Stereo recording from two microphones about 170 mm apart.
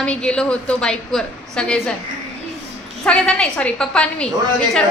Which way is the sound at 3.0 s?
5° left (ahead or behind).